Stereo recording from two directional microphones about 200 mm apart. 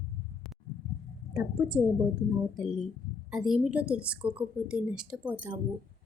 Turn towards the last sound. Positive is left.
turn(degrees=-5)  # may be behind; listen again after turning